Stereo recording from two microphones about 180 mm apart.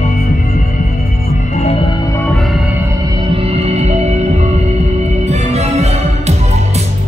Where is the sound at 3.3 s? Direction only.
35° right (ahead or behind).